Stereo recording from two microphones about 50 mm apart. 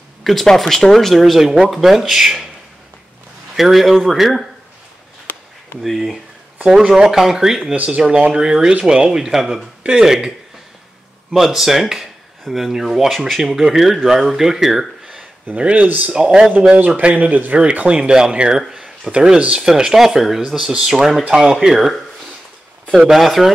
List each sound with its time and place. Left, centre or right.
0.2 s speech: centre
3.5 s speech: centre
5.8 s speech: centre
7.7 s speech: right
8.0 s speech: centre
11.3 s speech: centre
15.5 s speech: right
16.1 s speech: centre
16.7 s a man's voice: right
17.6 s speech: right
22.9 s speech: centre